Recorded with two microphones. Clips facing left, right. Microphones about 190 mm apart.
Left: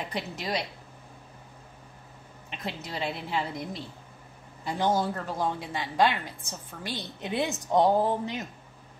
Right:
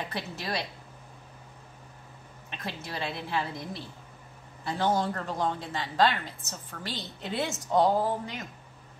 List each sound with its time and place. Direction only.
0.1 s speech: 15° left (ahead or behind)
2.5 s speech: 20° left (ahead or behind)